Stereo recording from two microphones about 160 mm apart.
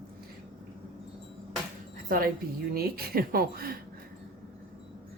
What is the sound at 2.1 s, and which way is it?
Speech, 60° right (ahead or behind).